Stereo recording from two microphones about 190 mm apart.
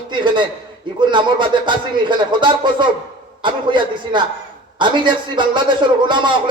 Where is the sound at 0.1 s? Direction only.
25° right (ahead or behind).